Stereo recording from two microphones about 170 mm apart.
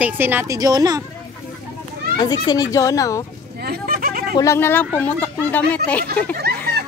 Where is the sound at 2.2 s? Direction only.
25° left (ahead or behind).